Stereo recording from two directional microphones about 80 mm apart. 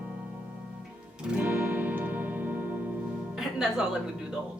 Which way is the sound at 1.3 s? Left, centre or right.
Centre.